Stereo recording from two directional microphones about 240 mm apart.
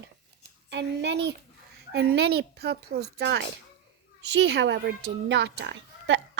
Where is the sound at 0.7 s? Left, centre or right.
Right.